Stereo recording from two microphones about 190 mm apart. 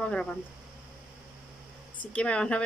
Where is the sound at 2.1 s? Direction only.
5° left (ahead or behind).